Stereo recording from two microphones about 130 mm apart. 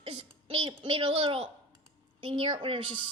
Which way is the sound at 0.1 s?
45° right (ahead or behind).